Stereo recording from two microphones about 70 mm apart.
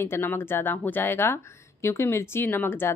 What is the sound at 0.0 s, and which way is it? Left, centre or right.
A woman's voice, left.